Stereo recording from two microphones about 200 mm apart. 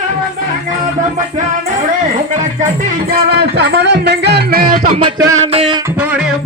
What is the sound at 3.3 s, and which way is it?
A man's voice, 55° right (ahead or behind).